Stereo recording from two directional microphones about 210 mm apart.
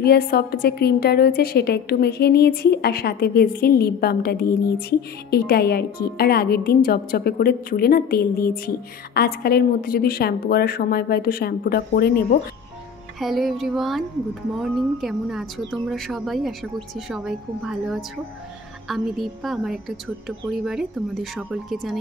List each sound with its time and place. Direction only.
0.0 s a woman's voice: 50° left (ahead or behind)
13.2 s a woman's voice: centre (ahead or behind)